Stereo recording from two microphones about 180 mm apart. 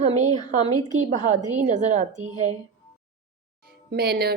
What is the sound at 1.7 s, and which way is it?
Speech, 40° right (ahead or behind).